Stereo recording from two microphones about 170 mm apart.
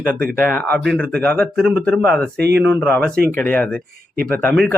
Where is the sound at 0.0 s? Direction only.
10° left (ahead or behind).